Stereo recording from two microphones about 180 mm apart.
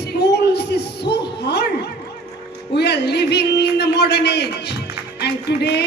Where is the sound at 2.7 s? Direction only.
70° left (ahead or behind).